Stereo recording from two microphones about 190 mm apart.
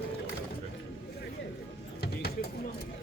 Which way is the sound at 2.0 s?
55° left (ahead or behind).